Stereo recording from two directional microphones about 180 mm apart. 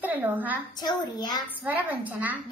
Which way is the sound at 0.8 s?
20° left (ahead or behind).